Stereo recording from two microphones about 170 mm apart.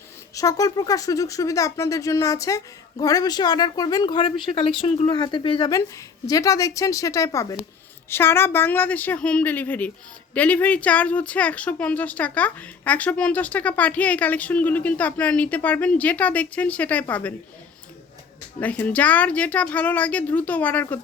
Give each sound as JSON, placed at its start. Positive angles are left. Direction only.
{"t": 0.3, "sound": "speech", "side_deg": 20}
{"t": 18.6, "sound": "speech", "side_deg": 10}